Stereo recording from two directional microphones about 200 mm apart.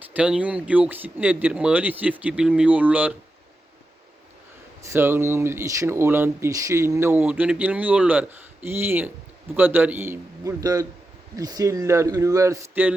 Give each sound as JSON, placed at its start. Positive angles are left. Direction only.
{"t": 0.1, "sound": "speech", "side_deg": -5}
{"t": 4.9, "sound": "speech", "side_deg": -10}